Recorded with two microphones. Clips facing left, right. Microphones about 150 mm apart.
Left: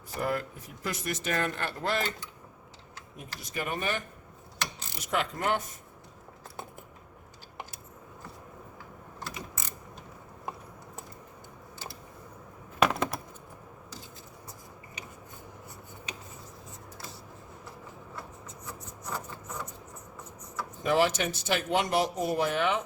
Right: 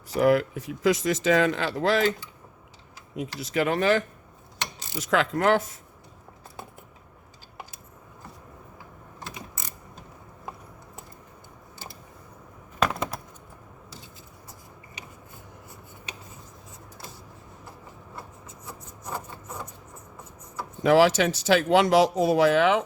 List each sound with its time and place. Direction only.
0.1 s speech: 90° right
3.2 s speech: 90° right
12.8 s a sound: 5° left (ahead or behind)
20.8 s speech: 90° right